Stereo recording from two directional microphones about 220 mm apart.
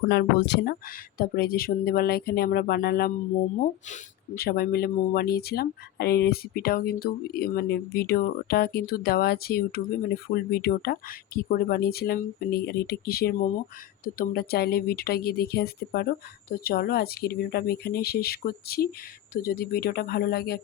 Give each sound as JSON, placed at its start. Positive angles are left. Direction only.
{"t": 0.1, "sound": "speech", "side_deg": 50}